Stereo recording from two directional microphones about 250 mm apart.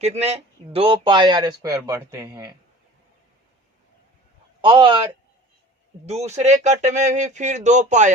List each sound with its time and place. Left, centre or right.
0.0 s speech: right
4.6 s speech: centre